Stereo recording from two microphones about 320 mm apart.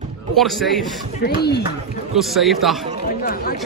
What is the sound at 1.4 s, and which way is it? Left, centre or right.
Speech, left.